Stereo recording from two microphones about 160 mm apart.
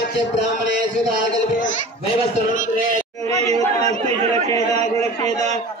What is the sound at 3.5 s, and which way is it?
Chatter, 45° right (ahead or behind).